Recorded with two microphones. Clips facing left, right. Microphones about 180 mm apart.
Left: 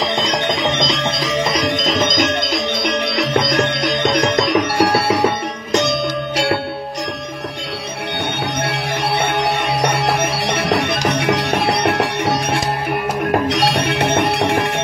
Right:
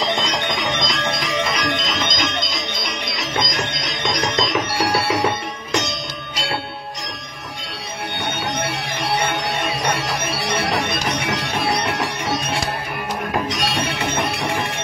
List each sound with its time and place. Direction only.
1.3 s music: 35° left (ahead or behind); by 5.2 s 55° left (ahead or behind)
8.6 s music: 65° left (ahead or behind)